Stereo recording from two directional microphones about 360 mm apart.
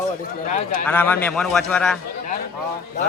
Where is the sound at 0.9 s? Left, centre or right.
Centre.